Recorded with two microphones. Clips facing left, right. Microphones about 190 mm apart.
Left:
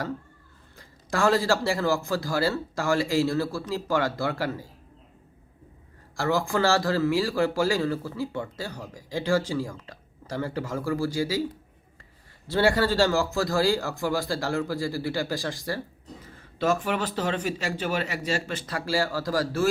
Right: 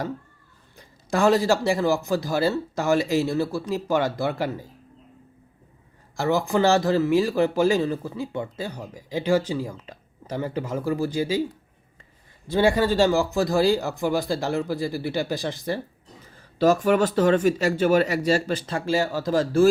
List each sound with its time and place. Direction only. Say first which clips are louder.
0.8 s speech: right 4 dB; 20° right (ahead or behind)
6.1 s speech: right 3 dB; 20° right (ahead or behind)
12.5 s speech: right 2 dB; 15° right (ahead or behind)
16.6 s a man's voice: right 7 dB; 40° right (ahead or behind); by 19.6 s 25° right (ahead or behind)